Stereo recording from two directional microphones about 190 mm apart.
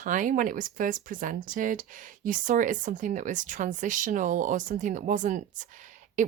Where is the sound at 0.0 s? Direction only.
45° right (ahead or behind).